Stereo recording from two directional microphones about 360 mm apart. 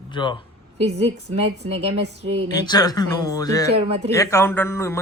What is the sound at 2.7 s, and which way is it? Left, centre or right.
Speech, centre.